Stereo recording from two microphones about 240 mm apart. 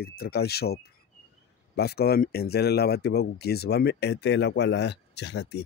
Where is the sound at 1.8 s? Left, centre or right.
Left.